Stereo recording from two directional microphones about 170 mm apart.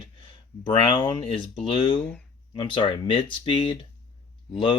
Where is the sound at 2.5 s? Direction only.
30° left (ahead or behind).